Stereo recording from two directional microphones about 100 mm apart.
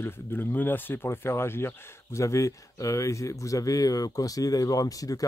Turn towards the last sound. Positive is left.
turn(degrees=35)  # may be behind; listen again after turning